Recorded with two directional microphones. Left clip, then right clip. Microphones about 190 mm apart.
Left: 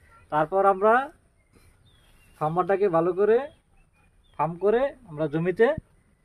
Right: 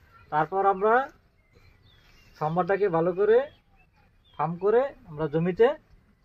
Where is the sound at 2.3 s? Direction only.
45° left (ahead or behind).